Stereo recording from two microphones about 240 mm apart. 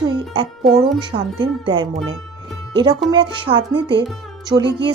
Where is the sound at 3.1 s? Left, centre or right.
Right.